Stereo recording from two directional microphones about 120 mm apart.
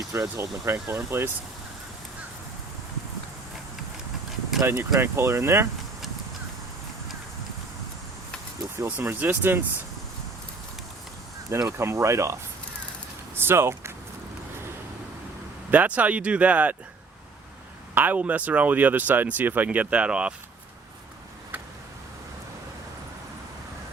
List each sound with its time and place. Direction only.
0.1 s speech: 25° right (ahead or behind)
4.6 s speech: 20° right (ahead or behind)
8.7 s speech: 20° right (ahead or behind)
11.5 s speech: 25° right (ahead or behind)
15.7 s speech: 15° right (ahead or behind)
17.9 s speech: 15° right (ahead or behind)